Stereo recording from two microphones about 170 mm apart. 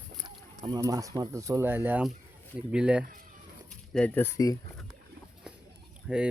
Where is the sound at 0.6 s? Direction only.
25° right (ahead or behind); by 3.0 s 5° right (ahead or behind).